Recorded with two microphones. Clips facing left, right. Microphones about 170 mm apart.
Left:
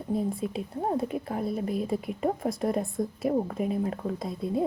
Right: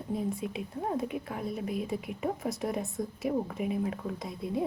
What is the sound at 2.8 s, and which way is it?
A woman's voice, 55° left (ahead or behind).